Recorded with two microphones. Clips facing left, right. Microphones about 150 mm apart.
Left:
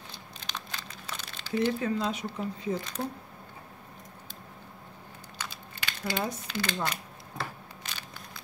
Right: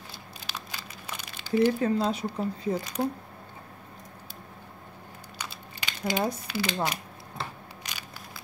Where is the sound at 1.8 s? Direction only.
35° right (ahead or behind).